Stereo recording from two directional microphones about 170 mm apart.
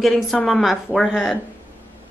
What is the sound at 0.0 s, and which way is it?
Speech, centre (ahead or behind).